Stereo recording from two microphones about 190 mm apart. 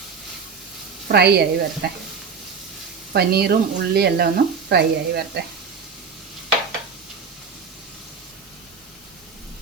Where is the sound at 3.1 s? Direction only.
55° right (ahead or behind).